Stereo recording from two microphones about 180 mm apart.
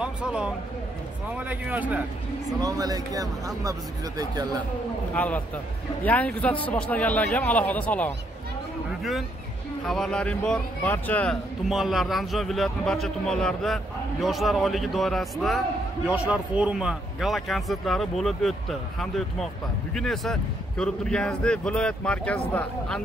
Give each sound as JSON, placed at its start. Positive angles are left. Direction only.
{"t": 0.0, "sound": "a man's voice", "side_deg": -5}
{"t": 2.6, "sound": "a man's voice", "side_deg": -20}
{"t": 5.1, "sound": "speech", "side_deg": 10}
{"t": 9.8, "sound": "speech", "side_deg": 0}